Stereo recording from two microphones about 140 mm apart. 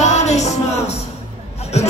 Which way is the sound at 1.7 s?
50° left (ahead or behind).